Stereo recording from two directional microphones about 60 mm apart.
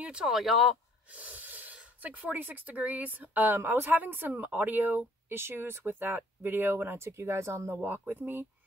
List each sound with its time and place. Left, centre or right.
0.0 s speech: centre
0.3 s speech: centre
1.1 s speech: right